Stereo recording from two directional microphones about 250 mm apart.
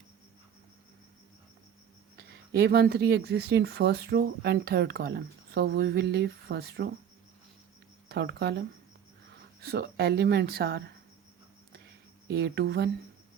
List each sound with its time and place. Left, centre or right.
2.1 s speech: right
8.1 s speech: right
12.3 s speech: right